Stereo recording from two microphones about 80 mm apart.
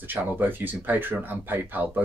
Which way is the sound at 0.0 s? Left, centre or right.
Right.